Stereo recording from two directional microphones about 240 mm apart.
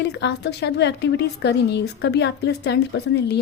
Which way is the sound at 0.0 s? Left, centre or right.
Left.